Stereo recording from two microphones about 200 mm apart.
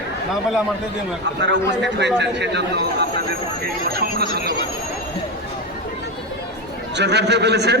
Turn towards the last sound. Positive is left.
turn(degrees=-55)  # may be behind; listen again after turning